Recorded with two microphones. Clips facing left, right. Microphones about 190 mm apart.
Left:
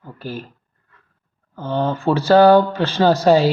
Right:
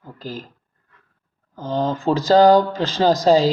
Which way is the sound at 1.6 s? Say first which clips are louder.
Left 1 dB; 15° right (ahead or behind).